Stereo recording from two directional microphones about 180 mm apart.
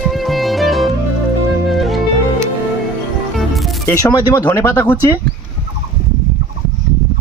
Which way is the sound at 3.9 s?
20° left (ahead or behind).